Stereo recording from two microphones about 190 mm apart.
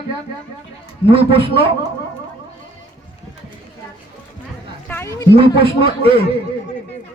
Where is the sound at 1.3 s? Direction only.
30° right (ahead or behind).